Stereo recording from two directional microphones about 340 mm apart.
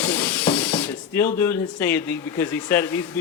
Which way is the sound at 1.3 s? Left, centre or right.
Centre.